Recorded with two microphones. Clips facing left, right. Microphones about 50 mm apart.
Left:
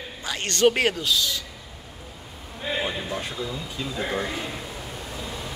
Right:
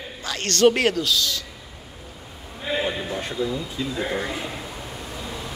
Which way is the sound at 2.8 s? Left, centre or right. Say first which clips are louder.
Right 3 dB; centre.